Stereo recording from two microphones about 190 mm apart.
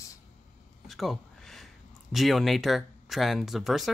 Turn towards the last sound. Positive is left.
turn(degrees=0)  # may be behind; listen again after turning